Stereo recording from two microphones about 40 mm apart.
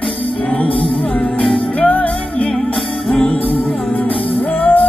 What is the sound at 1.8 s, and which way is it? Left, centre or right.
Music, left.